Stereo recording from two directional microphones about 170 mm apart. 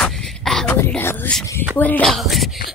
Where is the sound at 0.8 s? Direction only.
10° left (ahead or behind).